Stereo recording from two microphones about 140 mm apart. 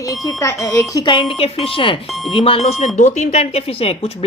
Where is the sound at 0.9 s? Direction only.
35° left (ahead or behind).